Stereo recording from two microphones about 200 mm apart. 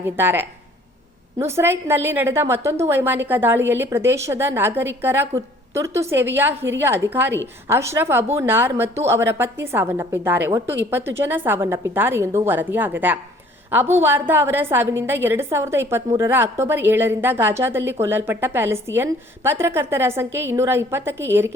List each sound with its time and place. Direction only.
0.0 s a woman's voice: 10° right (ahead or behind)